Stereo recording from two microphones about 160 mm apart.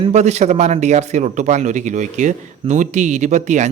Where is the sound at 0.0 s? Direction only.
45° right (ahead or behind).